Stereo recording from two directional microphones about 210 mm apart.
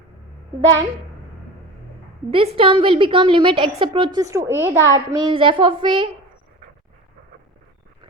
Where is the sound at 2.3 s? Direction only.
25° right (ahead or behind).